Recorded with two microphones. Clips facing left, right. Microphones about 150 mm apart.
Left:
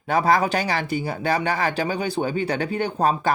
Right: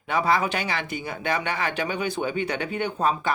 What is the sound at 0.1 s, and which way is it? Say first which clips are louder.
Speech: left 4 dB; 40° left (ahead or behind).